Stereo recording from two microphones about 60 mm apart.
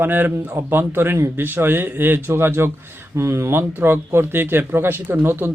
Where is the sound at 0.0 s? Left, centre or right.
Right.